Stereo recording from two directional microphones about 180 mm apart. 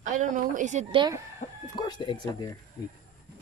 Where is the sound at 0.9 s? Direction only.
25° right (ahead or behind).